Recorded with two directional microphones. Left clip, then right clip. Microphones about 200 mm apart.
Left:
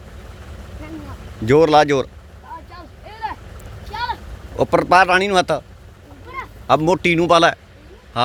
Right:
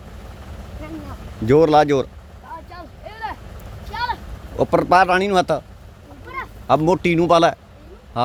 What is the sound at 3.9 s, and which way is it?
A man's voice, centre (ahead or behind).